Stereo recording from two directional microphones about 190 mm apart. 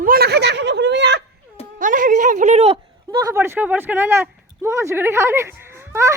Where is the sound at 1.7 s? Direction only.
45° right (ahead or behind).